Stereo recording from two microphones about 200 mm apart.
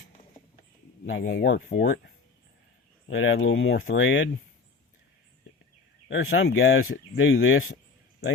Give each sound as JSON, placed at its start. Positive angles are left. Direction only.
{"t": 1.2, "sound": "speech", "side_deg": 60}
{"t": 3.1, "sound": "speech", "side_deg": 80}
{"t": 6.1, "sound": "speech", "side_deg": 75}